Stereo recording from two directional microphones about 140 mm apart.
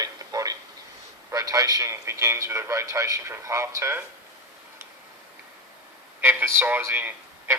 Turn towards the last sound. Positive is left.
turn(degrees=-15)  # may be behind; listen again after turning